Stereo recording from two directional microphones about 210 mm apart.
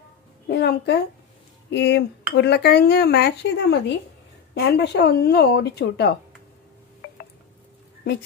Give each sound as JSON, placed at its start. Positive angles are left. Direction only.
{"t": 0.5, "sound": "speech", "side_deg": 50}